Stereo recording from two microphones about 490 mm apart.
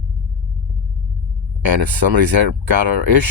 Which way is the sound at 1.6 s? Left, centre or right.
Right.